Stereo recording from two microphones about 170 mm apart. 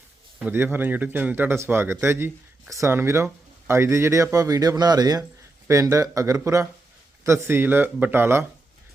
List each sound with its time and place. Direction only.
0.3 s speech: 10° right (ahead or behind)